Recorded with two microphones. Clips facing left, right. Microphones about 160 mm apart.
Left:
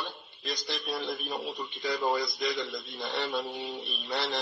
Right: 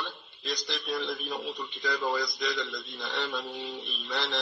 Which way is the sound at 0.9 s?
Centre (ahead or behind).